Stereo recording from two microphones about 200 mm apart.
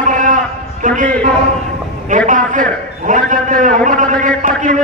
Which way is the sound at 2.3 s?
40° right (ahead or behind).